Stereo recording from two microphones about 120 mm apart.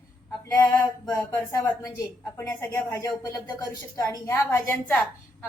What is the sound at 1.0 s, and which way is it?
A woman's voice, 30° left (ahead or behind).